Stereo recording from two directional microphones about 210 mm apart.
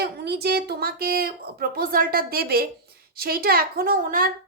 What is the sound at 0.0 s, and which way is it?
A woman's voice, 50° right (ahead or behind).